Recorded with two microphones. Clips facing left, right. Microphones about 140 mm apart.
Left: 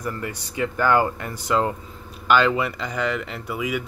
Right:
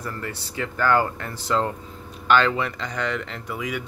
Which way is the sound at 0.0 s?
15° left (ahead or behind).